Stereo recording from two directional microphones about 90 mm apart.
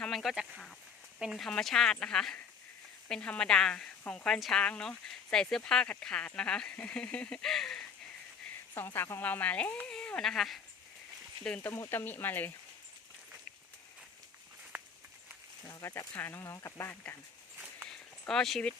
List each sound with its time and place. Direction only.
0.0 s a sound: centre (ahead or behind)
1.2 s speech: 5° right (ahead or behind)
1.5 s speech: 5° left (ahead or behind)
4.3 s speech: 5° left (ahead or behind)
8.7 s speech: 25° left (ahead or behind); by 10.6 s centre (ahead or behind)
11.6 s speech: 25° left (ahead or behind)
16.1 s speech: 20° left (ahead or behind)
16.4 s speech: 35° left (ahead or behind)
17.8 s a sound: 5° left (ahead or behind)